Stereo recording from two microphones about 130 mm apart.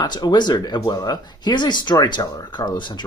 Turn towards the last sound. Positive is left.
turn(degrees=35)  # may be behind; listen again after turning